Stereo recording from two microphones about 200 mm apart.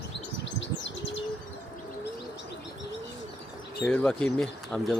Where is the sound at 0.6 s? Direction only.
65° left (ahead or behind).